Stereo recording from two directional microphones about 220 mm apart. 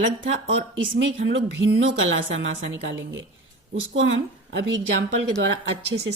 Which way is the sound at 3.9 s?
60° right (ahead or behind).